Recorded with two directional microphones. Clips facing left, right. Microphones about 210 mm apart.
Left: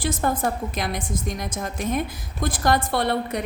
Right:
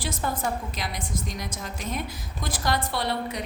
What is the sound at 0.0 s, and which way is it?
A woman's voice, 50° left (ahead or behind).